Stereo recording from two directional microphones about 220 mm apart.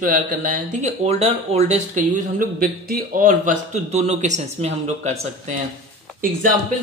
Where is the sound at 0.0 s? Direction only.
40° right (ahead or behind).